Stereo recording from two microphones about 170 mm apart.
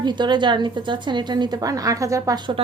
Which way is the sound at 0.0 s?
25° right (ahead or behind).